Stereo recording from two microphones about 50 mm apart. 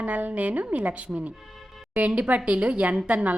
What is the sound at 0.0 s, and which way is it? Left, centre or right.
A woman's voice, right.